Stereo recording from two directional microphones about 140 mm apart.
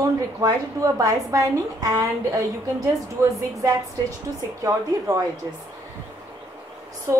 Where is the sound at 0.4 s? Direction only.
25° right (ahead or behind).